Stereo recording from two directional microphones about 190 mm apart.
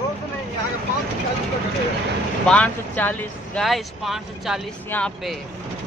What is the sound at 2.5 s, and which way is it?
Speech, 10° left (ahead or behind).